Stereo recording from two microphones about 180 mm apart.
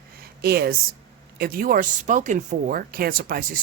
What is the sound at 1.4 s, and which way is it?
Speech, 50° right (ahead or behind).